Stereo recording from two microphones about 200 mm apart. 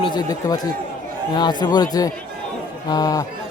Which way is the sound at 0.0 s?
20° left (ahead or behind).